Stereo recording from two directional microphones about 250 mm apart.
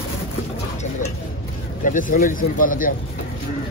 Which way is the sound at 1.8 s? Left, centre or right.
Left.